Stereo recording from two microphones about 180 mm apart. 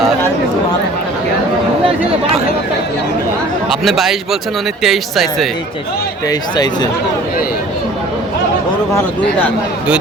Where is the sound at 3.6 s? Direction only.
Centre (ahead or behind).